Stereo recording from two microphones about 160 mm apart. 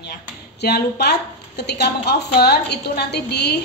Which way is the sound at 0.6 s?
90° left.